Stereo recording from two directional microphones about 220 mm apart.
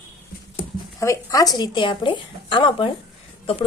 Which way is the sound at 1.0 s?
15° left (ahead or behind).